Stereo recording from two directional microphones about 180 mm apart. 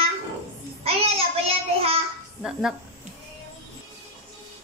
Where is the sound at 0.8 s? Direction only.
35° right (ahead or behind).